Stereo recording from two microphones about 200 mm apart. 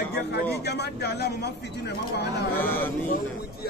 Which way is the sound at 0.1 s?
55° left (ahead or behind).